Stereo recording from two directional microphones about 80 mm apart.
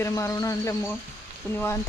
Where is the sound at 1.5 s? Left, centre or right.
Left.